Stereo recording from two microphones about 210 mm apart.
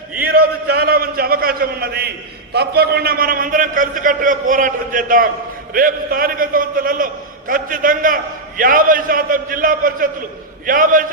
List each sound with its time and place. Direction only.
0.3 s a man's voice: 45° right (ahead or behind)